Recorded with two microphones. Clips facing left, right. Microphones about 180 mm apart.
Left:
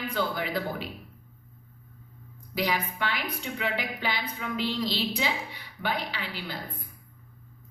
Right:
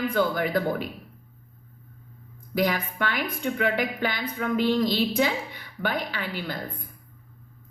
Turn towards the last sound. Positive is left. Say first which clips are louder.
# right 5 dB
turn(degrees=-50)  # may be behind; listen again after turning